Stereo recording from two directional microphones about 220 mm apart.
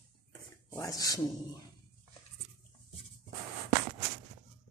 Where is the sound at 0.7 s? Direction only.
15° left (ahead or behind).